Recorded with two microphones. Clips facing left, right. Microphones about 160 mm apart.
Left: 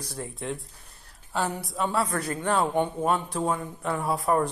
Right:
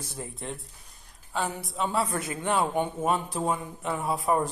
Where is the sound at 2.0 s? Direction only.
30° right (ahead or behind).